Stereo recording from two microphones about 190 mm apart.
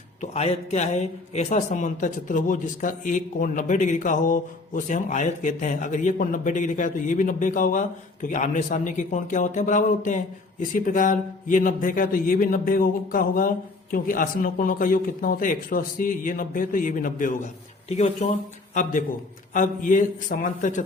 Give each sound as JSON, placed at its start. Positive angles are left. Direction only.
{"t": 0.2, "sound": "a man's voice", "side_deg": 35}